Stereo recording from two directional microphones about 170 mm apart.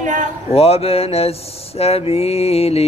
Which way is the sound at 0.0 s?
50° right (ahead or behind).